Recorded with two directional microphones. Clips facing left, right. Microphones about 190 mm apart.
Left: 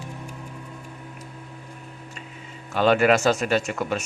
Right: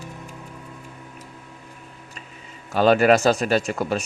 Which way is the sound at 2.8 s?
40° right (ahead or behind).